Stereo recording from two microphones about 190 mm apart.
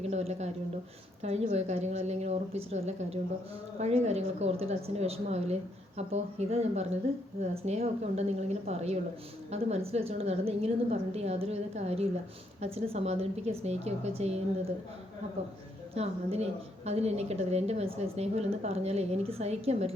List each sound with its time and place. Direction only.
0.0 s a woman's voice: 35° right (ahead or behind)
16.0 s a woman's voice: 35° right (ahead or behind)